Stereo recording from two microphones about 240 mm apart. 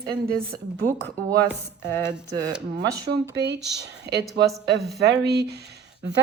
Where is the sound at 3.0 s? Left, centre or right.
Right.